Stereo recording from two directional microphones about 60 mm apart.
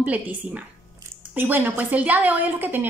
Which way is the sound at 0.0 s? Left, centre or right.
Right.